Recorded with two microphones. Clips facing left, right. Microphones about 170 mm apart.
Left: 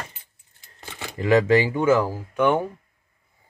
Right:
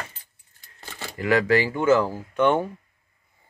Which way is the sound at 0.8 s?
15° left (ahead or behind).